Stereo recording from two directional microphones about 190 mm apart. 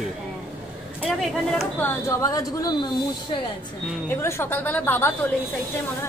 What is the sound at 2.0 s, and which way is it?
Speech, 15° left (ahead or behind).